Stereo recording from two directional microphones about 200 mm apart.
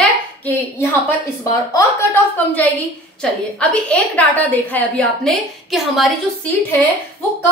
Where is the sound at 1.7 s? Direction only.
10° left (ahead or behind).